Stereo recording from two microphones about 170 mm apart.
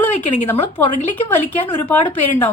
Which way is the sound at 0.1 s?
45° left (ahead or behind).